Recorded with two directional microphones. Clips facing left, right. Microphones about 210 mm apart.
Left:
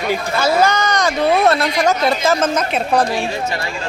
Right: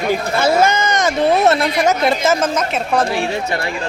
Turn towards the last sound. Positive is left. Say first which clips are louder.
# left 1 dB
turn(degrees=-5)  # may be behind; listen again after turning